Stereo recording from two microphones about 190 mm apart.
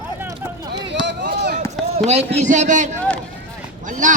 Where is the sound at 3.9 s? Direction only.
45° right (ahead or behind).